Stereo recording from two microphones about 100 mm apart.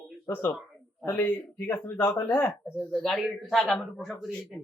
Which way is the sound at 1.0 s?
20° left (ahead or behind).